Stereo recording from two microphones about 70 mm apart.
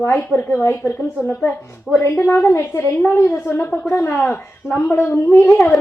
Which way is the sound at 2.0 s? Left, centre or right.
Left.